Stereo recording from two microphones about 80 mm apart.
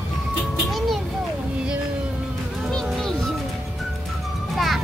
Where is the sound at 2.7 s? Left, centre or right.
Centre.